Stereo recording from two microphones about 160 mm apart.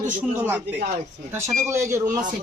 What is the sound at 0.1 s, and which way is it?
Speech, 10° right (ahead or behind).